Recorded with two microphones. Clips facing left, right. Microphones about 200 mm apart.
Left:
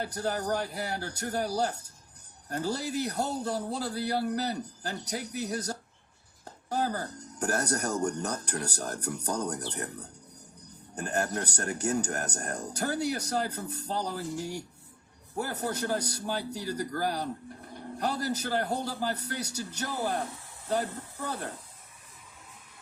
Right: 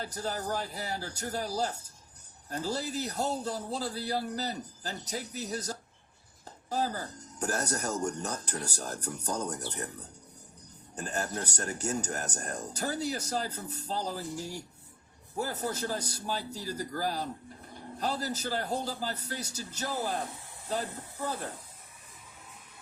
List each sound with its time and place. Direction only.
0.0 s a man's voice: 60° left (ahead or behind)
10.9 s a man's voice: 60° left (ahead or behind)